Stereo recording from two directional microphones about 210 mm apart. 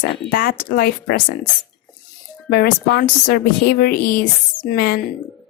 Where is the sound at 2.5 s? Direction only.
50° left (ahead or behind).